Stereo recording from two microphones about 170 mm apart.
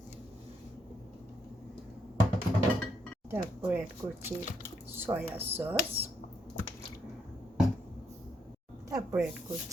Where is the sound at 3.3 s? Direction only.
10° right (ahead or behind).